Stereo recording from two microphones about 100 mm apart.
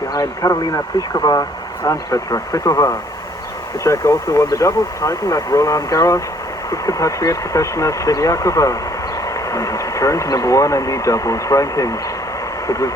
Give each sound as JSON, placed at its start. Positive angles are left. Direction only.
{"t": 0.1, "sound": "speech", "side_deg": 35}